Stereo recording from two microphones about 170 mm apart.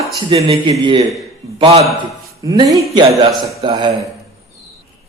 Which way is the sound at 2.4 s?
25° right (ahead or behind).